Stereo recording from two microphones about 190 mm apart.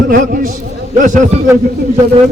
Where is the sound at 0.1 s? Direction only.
45° right (ahead or behind).